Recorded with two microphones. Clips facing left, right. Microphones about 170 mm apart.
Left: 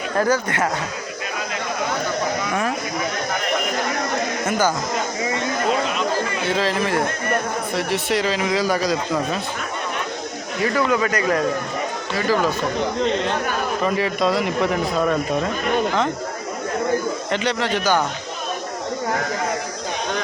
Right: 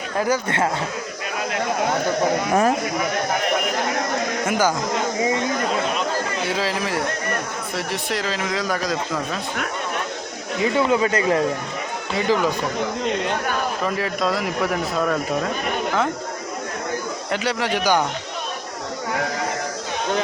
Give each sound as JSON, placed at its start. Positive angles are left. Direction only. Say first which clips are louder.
{"t": 0.4, "sound": "speech", "louder": "right 1 dB", "side_deg": -25}
{"t": 4.4, "sound": "speech", "louder": "even", "side_deg": -10}
{"t": 6.5, "sound": "speech", "louder": "left 5 dB", "side_deg": -10}
{"t": 10.6, "sound": "speech", "louder": "right 1 dB", "side_deg": -25}
{"t": 13.8, "sound": "speech", "louder": "left 5 dB", "side_deg": 0}
{"t": 17.3, "sound": "speech", "louder": "even", "side_deg": -10}